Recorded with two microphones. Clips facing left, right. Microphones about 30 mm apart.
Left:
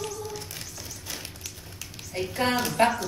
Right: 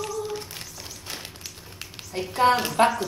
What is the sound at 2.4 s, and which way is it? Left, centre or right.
Speech, right.